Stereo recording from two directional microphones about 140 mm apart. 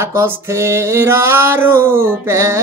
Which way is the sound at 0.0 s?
20° right (ahead or behind).